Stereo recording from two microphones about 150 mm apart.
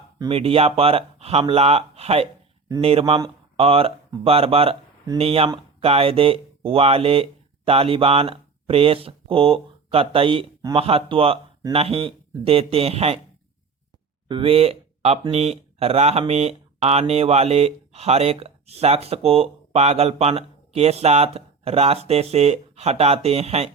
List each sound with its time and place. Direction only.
0.3 s speech: 40° right (ahead or behind)
14.3 s speech: 35° right (ahead or behind)